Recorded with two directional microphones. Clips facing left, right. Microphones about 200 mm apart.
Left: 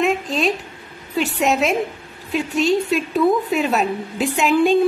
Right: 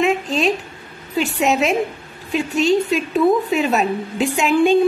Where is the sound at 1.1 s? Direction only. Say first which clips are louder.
Right 1 dB; centre (ahead or behind).